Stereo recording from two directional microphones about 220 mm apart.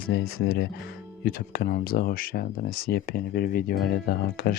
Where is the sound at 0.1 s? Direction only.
45° left (ahead or behind).